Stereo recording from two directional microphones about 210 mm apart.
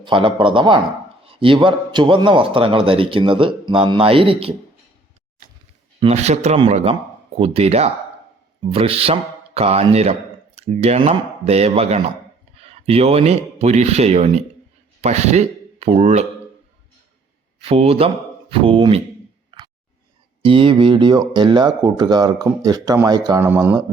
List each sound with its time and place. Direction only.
0.0 s speech: 25° right (ahead or behind)
6.0 s speech: 30° right (ahead or behind)
17.6 s speech: 25° right (ahead or behind)
18.6 s a sound: 25° right (ahead or behind)
20.4 s speech: 25° right (ahead or behind); by 23.8 s 10° right (ahead or behind)